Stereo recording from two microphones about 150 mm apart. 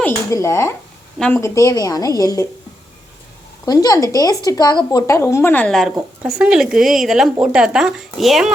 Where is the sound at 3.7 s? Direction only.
25° left (ahead or behind).